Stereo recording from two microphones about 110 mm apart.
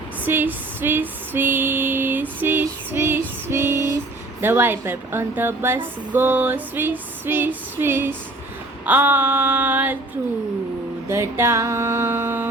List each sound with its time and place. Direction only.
0.3 s a sound: 20° right (ahead or behind)
2.4 s female singing: 15° right (ahead or behind)
4.4 s speech: 20° right (ahead or behind)
8.9 s female singing: 15° right (ahead or behind)
11.1 s speech: 25° right (ahead or behind)